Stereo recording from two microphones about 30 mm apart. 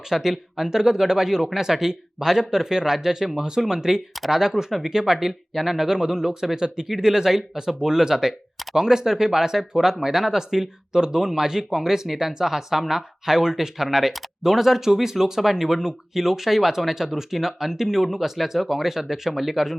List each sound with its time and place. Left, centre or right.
0.1 s speech: centre